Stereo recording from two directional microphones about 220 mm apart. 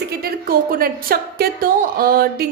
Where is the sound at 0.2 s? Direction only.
40° right (ahead or behind).